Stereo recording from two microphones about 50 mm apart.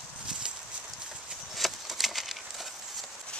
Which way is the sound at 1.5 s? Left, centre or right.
Centre.